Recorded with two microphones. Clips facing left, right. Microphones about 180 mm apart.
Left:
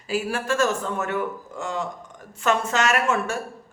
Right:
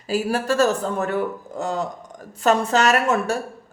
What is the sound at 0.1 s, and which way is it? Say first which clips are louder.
Speech: right 3 dB; 40° right (ahead or behind).